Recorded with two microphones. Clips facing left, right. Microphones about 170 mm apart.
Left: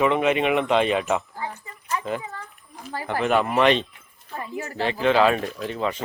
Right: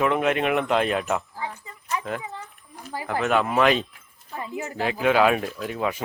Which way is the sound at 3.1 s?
Centre (ahead or behind).